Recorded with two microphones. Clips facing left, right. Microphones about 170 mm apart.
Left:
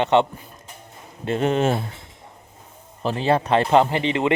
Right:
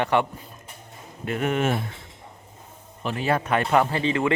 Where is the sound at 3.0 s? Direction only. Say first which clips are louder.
Left 4 dB; 30° left (ahead or behind).